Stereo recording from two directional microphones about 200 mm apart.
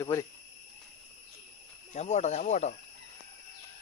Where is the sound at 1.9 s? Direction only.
35° left (ahead or behind).